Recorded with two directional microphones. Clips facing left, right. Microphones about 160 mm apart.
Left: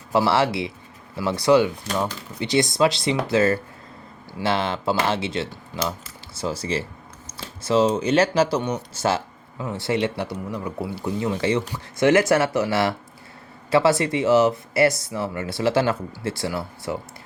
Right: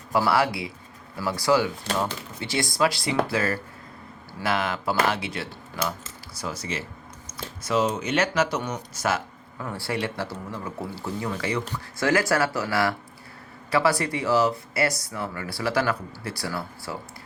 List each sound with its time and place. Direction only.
0.1 s speech: 25° left (ahead or behind)